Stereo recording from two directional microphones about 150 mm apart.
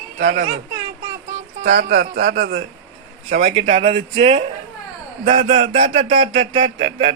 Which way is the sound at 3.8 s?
40° right (ahead or behind).